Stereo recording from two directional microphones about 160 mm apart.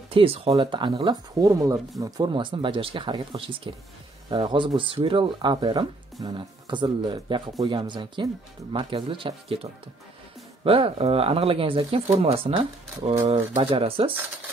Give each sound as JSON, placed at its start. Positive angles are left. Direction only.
{"t": 0.1, "sound": "speech", "side_deg": -35}